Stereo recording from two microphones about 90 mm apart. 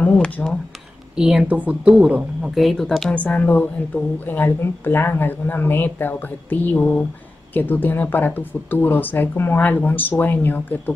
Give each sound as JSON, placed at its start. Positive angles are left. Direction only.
{"t": 0.0, "sound": "a sound", "side_deg": 15}
{"t": 1.1, "sound": "a woman's voice", "side_deg": -10}
{"t": 2.5, "sound": "speech", "side_deg": 0}
{"t": 3.2, "sound": "a woman's voice", "side_deg": 15}